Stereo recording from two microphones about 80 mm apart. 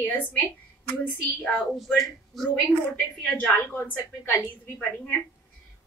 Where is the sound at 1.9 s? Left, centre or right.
Centre.